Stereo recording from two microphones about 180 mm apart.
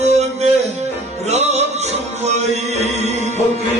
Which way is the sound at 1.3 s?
35° right (ahead or behind).